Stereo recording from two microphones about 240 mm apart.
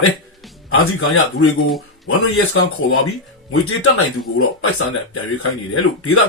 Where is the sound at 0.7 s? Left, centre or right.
Left.